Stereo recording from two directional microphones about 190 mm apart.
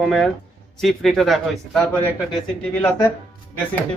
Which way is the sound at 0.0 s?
Centre (ahead or behind).